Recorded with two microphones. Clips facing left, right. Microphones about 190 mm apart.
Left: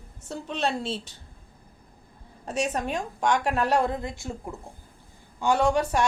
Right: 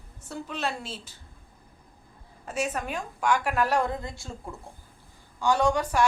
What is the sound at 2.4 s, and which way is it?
A woman's voice, 30° left (ahead or behind).